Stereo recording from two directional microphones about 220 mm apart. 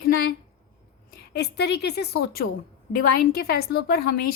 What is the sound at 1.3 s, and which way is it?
Speech, 50° left (ahead or behind).